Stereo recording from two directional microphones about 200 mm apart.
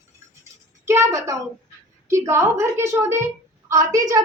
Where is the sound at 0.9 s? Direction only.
15° right (ahead or behind).